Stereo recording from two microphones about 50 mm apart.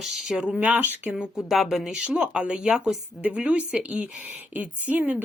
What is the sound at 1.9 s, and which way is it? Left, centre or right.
Speech, right.